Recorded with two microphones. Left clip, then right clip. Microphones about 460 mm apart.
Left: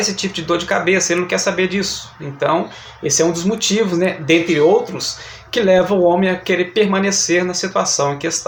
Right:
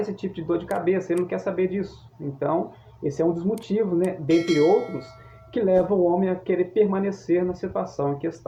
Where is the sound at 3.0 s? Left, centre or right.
Right.